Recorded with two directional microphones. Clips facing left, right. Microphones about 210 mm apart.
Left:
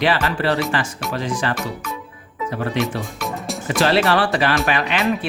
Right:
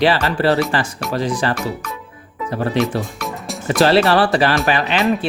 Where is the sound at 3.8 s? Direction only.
35° right (ahead or behind).